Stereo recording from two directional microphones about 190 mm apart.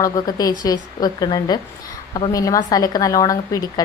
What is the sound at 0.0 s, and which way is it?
A woman's voice, 20° left (ahead or behind).